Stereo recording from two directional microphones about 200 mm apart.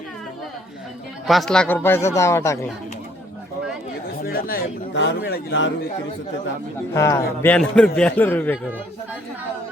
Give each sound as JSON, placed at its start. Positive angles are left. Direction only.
{"t": 1.3, "sound": "a man's voice", "side_deg": 0}
{"t": 4.2, "sound": "chatter", "side_deg": 45}
{"t": 4.9, "sound": "a man's voice", "side_deg": 60}
{"t": 6.9, "sound": "a man's voice", "side_deg": 15}